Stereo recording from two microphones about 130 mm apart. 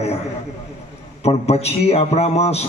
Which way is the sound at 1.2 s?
55° left (ahead or behind).